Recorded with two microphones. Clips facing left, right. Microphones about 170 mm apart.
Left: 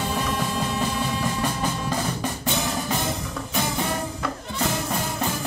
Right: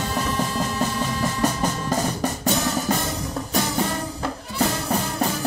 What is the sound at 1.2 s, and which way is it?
Music, 40° right (ahead or behind).